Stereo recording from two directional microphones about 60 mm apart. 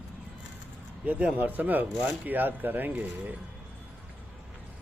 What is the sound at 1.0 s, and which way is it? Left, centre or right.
Speech, right.